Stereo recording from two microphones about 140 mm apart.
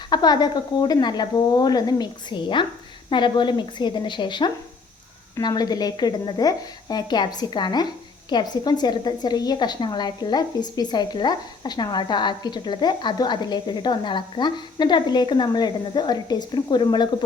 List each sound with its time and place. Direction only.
0.1 s a woman's voice: 30° left (ahead or behind)